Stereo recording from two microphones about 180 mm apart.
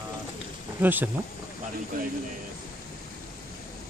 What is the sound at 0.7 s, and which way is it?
Speech, 10° right (ahead or behind).